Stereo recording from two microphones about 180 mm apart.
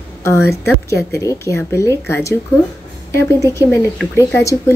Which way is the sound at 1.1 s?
15° left (ahead or behind).